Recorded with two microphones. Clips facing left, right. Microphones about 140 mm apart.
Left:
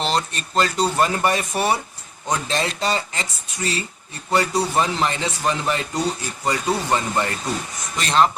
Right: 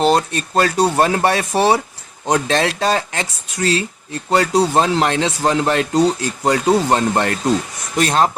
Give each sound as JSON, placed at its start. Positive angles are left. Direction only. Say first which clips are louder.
{"t": 0.0, "sound": "speech", "louder": "right 8 dB", "side_deg": -55}
{"t": 1.0, "sound": "speech", "louder": "right 4 dB", "side_deg": -75}
{"t": 2.3, "sound": "speech", "louder": "right 7 dB", "side_deg": -70}
{"t": 7.9, "sound": "speech", "louder": "right 3 dB", "side_deg": -45}